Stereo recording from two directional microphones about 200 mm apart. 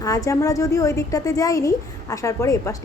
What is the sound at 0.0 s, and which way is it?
A woman's voice, 15° left (ahead or behind).